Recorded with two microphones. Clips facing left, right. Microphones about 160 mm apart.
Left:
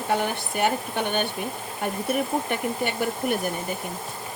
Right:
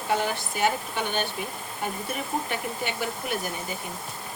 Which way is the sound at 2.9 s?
55° left (ahead or behind).